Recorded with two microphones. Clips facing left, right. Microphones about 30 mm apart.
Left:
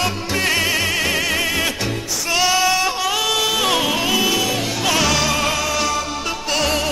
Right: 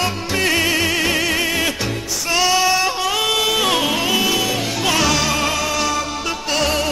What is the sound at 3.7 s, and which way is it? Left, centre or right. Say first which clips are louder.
Music: even; right.